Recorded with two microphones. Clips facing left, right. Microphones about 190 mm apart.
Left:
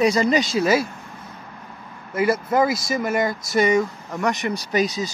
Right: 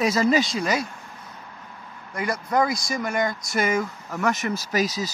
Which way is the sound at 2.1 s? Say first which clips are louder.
Left 5 dB; 5° left (ahead or behind).